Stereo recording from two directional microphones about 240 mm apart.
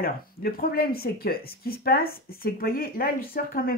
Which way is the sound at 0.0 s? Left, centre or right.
Left.